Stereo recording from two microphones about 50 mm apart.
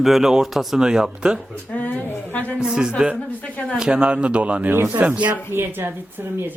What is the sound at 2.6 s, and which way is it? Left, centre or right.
A man's voice, centre.